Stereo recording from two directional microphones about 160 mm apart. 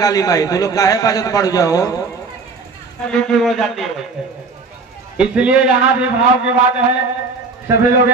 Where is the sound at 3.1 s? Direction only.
Centre (ahead or behind).